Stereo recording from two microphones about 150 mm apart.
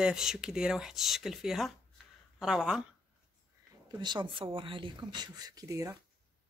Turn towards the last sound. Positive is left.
turn(degrees=-20)  # may be behind; listen again after turning